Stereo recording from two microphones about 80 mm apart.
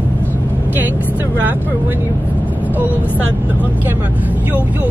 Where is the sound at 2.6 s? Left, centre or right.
Right.